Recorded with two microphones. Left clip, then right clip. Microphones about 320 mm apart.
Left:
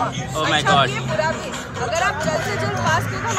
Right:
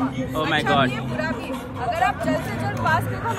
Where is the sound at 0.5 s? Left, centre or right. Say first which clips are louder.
Left 4 dB; centre.